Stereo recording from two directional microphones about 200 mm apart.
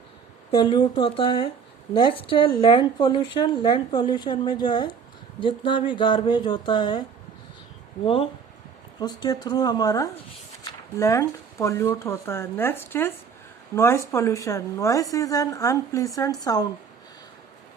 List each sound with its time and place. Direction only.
0.5 s a woman's voice: 25° left (ahead or behind)
8.0 s a woman's voice: 25° left (ahead or behind)